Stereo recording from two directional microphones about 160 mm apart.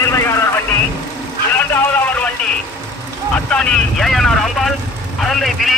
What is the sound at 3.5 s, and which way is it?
Speech, 5° left (ahead or behind).